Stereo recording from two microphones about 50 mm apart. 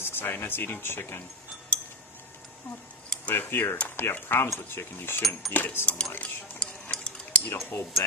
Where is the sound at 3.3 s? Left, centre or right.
Left.